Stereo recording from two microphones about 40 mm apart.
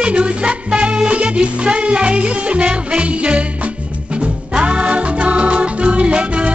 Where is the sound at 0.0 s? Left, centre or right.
Right.